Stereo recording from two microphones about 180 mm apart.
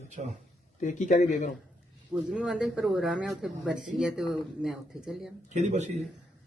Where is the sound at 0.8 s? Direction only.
45° left (ahead or behind).